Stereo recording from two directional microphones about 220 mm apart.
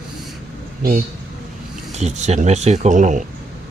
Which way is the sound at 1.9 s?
30° right (ahead or behind).